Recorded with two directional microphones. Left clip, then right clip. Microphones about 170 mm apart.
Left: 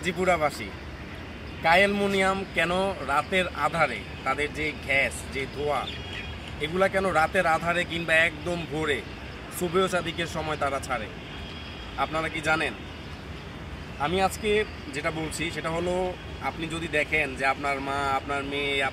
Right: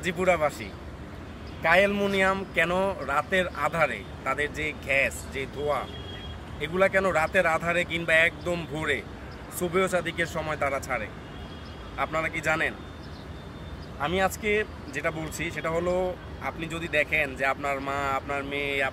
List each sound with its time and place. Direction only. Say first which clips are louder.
0.0 s speech: even; 35° right (ahead or behind)
1.6 s speech: left 1 dB; 30° right (ahead or behind)
12.0 s speech: even; 25° right (ahead or behind)
14.0 s speech: left 1 dB; 20° right (ahead or behind)